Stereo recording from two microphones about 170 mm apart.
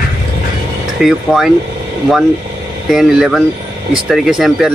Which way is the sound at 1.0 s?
Centre (ahead or behind).